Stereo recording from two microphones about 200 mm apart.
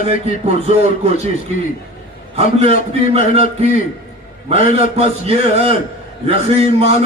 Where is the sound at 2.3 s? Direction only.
30° right (ahead or behind).